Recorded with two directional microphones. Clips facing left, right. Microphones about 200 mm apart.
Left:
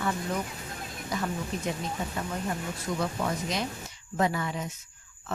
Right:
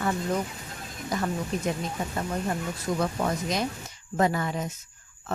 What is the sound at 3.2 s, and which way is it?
A woman's voice, 45° right (ahead or behind).